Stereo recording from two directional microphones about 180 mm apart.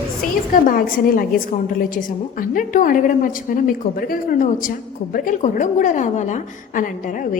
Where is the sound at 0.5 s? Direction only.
50° left (ahead or behind).